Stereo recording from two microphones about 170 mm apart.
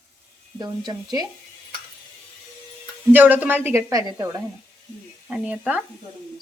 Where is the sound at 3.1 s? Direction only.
10° right (ahead or behind).